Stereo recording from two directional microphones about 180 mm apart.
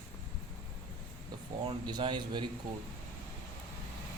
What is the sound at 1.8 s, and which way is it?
Speech, 25° right (ahead or behind).